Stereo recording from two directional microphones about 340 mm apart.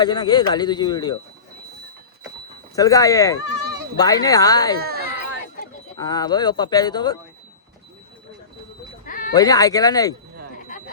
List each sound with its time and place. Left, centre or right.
0.0 s speech: centre
2.7 s speech: centre
4.8 s chatter: right
6.0 s speech: centre
9.0 s bleat: left
9.3 s speech: centre